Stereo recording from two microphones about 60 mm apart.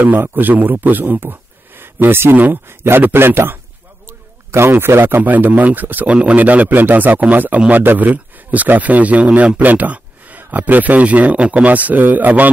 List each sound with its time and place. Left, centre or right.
0.0 s a man's voice: right